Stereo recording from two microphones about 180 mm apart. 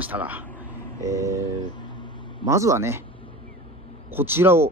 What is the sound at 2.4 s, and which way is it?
Speech, 15° right (ahead or behind).